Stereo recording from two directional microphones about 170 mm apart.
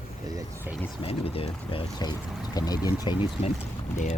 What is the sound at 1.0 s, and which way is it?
Speech, 35° left (ahead or behind).